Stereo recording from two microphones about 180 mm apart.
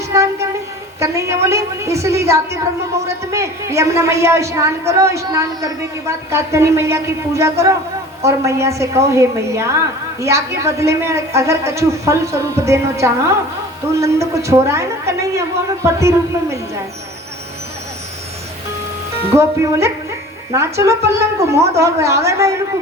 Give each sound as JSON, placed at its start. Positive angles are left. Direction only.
{"t": 0.1, "sound": "a sound", "side_deg": -15}
{"t": 0.9, "sound": "a woman's voice", "side_deg": -15}
{"t": 19.3, "sound": "a woman's voice", "side_deg": -15}